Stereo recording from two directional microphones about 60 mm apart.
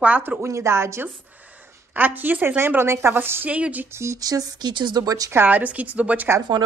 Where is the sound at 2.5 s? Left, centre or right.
Right.